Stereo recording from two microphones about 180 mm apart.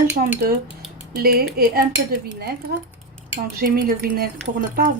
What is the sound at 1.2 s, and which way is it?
Speech, 55° right (ahead or behind).